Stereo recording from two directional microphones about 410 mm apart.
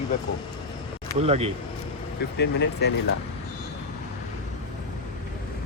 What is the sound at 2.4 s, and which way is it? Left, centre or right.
Speech, left.